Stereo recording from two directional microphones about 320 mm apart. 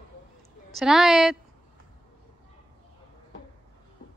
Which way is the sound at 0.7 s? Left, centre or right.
Centre.